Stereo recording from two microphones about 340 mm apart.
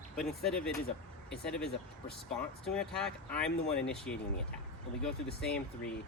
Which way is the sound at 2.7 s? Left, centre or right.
Centre.